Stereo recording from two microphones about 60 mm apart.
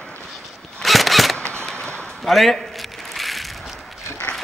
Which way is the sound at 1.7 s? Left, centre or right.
Centre.